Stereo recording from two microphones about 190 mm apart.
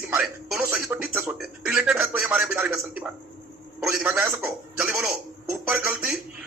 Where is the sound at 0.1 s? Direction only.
5° right (ahead or behind).